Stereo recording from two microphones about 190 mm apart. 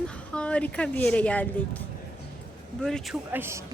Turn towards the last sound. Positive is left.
turn(degrees=-15)  # may be behind; listen again after turning